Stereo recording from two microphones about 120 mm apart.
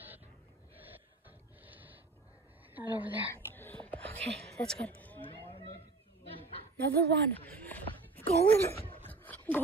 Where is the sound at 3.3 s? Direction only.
20° left (ahead or behind).